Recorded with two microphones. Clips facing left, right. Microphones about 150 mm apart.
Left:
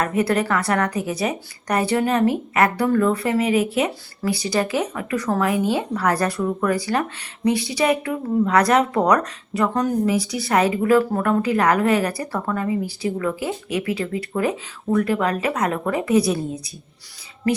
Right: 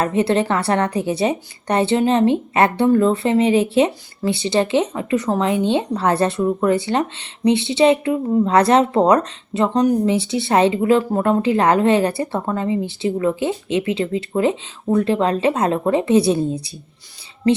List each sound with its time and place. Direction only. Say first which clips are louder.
0.0 s speech: right 3 dB; 25° right (ahead or behind)